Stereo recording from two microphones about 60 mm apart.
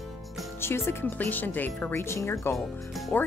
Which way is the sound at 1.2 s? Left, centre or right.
Left.